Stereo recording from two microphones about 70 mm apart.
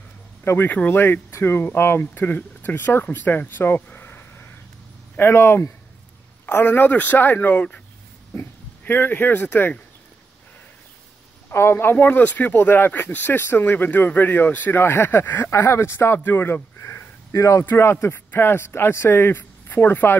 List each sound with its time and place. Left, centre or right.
0.4 s a man's voice: left
1.0 s a man's voice: left
11.5 s speech: left
17.6 s speech: left